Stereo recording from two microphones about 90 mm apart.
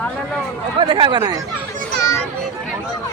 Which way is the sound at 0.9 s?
70° right (ahead or behind).